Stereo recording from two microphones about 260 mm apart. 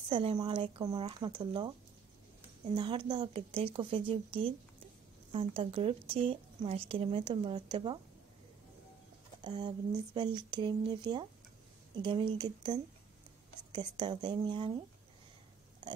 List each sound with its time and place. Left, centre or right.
0.1 s speech: centre
2.7 s speech: centre
9.4 s speech: centre